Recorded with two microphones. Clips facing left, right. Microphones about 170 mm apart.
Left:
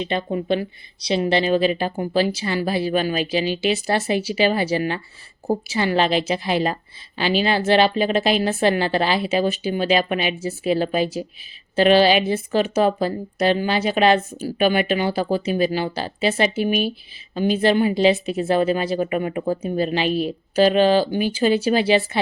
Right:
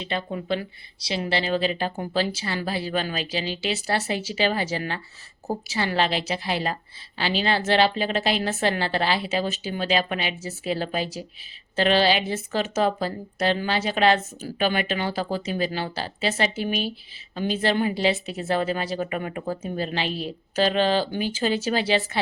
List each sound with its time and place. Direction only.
0.0 s a woman's voice: 20° left (ahead or behind)